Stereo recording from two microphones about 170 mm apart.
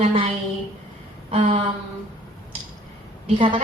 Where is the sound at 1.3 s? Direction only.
35° right (ahead or behind).